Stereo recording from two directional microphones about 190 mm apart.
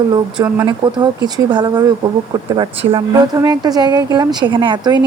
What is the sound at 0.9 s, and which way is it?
Speech, 25° right (ahead or behind).